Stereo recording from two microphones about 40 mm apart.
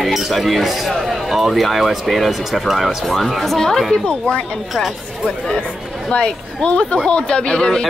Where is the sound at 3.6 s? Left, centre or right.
Centre.